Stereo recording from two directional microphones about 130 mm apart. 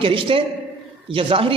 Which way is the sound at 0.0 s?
45° right (ahead or behind).